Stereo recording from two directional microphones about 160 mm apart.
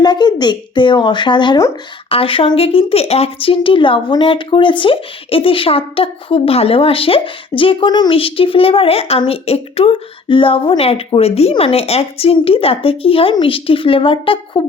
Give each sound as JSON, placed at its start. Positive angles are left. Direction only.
{"t": 0.0, "sound": "a woman's voice", "side_deg": 25}